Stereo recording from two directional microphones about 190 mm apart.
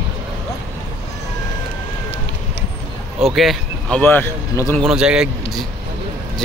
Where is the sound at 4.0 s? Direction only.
10° left (ahead or behind).